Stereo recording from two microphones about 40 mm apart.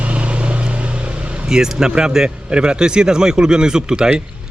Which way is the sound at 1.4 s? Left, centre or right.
Centre.